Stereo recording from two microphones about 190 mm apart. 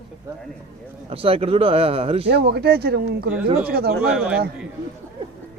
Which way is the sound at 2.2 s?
60° right (ahead or behind).